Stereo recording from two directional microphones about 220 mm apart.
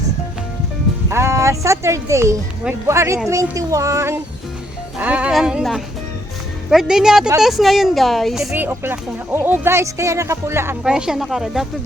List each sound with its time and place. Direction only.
1.1 s speech: 10° right (ahead or behind)